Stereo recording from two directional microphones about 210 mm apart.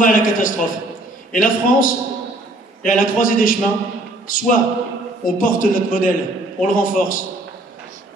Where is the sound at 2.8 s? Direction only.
40° left (ahead or behind).